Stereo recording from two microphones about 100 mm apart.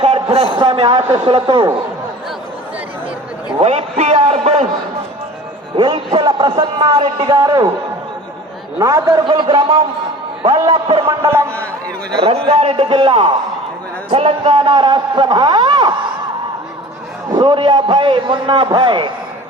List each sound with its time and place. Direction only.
0.0 s a man's voice: 75° right (ahead or behind); by 1.6 s 55° right (ahead or behind)
3.6 s a man's voice: 90° right
5.7 s a man's voice: 55° right (ahead or behind)
7.3 s a man's voice: 35° right (ahead or behind)
8.8 s a man's voice: 30° right (ahead or behind)
9.2 s a man's voice: 50° right (ahead or behind)
11.3 s a man's voice: 25° right (ahead or behind)
12.5 s a man's voice: 80° right; by 16.0 s 50° right (ahead or behind)
17.3 s a man's voice: 55° right (ahead or behind)